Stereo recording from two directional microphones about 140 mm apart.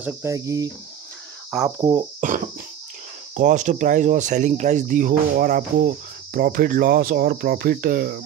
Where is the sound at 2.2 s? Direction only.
65° right (ahead or behind); by 8.2 s 90° right.